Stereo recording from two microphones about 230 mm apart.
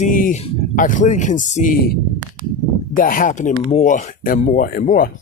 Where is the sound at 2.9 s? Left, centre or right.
Left.